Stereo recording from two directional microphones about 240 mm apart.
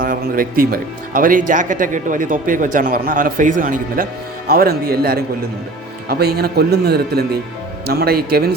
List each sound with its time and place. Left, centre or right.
0.0 s speech: right